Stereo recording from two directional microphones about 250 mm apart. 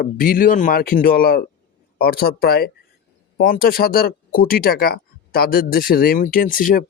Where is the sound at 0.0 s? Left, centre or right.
Left.